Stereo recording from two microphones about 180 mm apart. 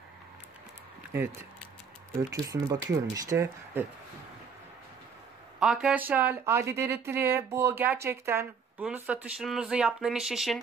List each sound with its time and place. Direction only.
2.3 s speech: 20° right (ahead or behind)
5.6 s speech: 5° right (ahead or behind)